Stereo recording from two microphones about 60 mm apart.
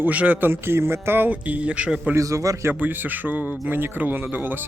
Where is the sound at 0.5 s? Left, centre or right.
Right; by 2.1 s centre.